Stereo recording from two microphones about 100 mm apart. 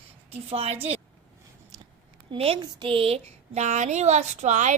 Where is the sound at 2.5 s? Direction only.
60° right (ahead or behind).